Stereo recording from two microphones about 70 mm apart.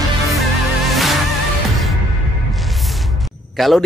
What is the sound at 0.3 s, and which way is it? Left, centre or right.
Music, centre.